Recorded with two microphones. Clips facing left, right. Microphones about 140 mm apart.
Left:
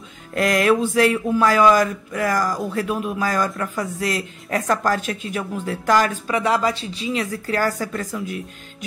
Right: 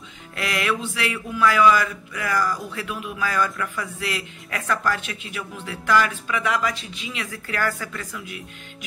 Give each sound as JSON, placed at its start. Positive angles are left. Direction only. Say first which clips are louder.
{"t": 0.3, "sound": "speech", "louder": "left 8 dB", "side_deg": 45}